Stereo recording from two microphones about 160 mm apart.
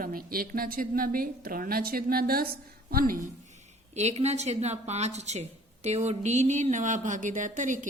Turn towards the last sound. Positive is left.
turn(degrees=-50)  # may be behind; listen again after turning